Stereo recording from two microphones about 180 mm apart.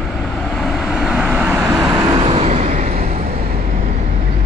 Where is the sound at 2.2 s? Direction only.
35° right (ahead or behind).